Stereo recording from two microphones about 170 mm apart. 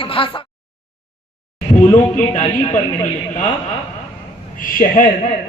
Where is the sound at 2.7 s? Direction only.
45° left (ahead or behind).